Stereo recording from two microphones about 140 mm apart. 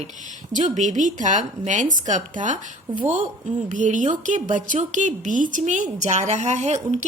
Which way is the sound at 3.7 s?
65° right (ahead or behind).